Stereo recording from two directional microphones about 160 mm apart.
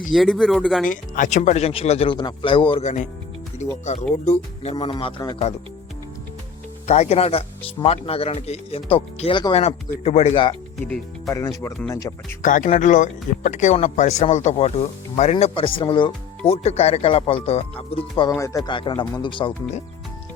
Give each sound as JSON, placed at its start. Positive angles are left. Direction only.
{"t": 0.1, "sound": "speech", "side_deg": 0}
{"t": 0.9, "sound": "speech", "side_deg": 55}
{"t": 2.8, "sound": "speech", "side_deg": 50}
{"t": 6.8, "sound": "speech", "side_deg": 45}
{"t": 11.3, "sound": "speech", "side_deg": 20}
{"t": 12.4, "sound": "speech", "side_deg": 55}
{"t": 16.5, "sound": "speech", "side_deg": 40}
{"t": 18.3, "sound": "speech", "side_deg": 20}